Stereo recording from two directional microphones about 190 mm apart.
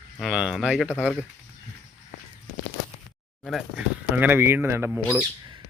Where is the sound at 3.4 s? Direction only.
Centre (ahead or behind).